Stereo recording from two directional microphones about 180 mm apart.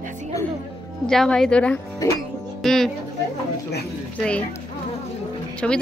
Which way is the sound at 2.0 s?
20° left (ahead or behind).